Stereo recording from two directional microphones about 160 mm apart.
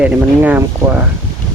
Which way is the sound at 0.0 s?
10° right (ahead or behind).